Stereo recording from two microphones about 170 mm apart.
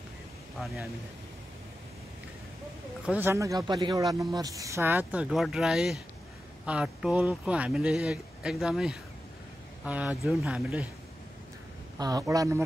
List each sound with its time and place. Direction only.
3.1 s speech: 15° right (ahead or behind)
10.2 s speech: 5° right (ahead or behind)
12.0 s speech: 20° right (ahead or behind)